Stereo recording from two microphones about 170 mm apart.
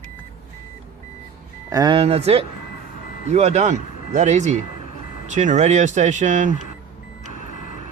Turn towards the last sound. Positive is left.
turn(degrees=50)  # may be behind; listen again after turning